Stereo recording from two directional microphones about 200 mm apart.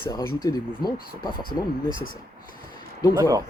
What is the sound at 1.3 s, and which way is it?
Speech, 45° left (ahead or behind).